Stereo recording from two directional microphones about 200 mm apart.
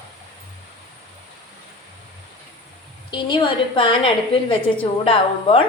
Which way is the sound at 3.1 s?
20° left (ahead or behind).